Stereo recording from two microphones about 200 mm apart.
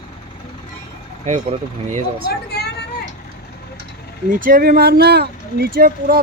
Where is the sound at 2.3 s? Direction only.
55° left (ahead or behind).